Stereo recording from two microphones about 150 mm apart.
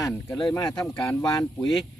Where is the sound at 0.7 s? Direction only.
5° left (ahead or behind).